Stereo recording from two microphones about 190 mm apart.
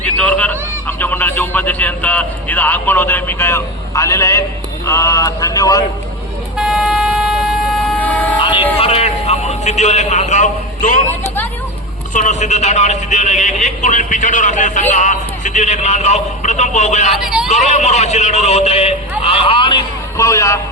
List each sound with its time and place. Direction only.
0.0 s a sound: 10° left (ahead or behind)
4.9 s speech: 15° left (ahead or behind)
6.6 s vehicle: centre (ahead or behind)
8.4 s a sound: 25° left (ahead or behind)
8.8 s a man's voice: 30° left (ahead or behind)
12.1 s a man's voice: 40° left (ahead or behind)
17.1 s speech: centre (ahead or behind)
17.5 s a man's voice: 40° left (ahead or behind); by 20.6 s 15° left (ahead or behind)